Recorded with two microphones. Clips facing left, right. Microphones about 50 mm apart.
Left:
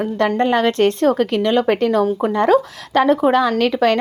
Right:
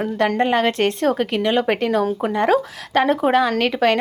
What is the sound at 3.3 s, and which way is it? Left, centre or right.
Speech, centre.